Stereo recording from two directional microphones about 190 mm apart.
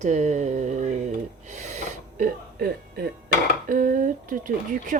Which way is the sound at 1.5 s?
40° right (ahead or behind).